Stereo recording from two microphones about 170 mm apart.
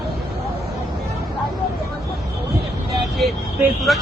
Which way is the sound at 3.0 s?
Centre (ahead or behind).